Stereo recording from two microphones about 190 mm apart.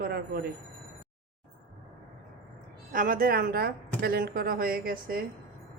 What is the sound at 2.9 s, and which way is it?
Speech, 45° right (ahead or behind).